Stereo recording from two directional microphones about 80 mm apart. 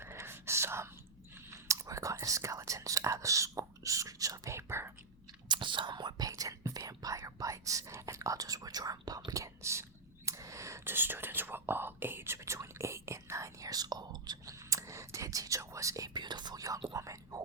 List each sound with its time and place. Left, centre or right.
0.0 s whispering: right
5.5 s whispering: right
6.2 s whispering: right
14.7 s whispering: right
16.1 s whispering: right
16.9 s whispering: right